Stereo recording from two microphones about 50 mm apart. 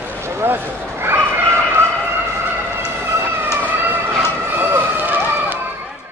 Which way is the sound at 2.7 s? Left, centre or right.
Right.